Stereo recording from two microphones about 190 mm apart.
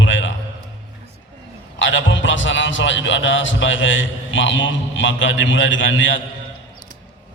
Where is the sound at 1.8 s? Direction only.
80° left.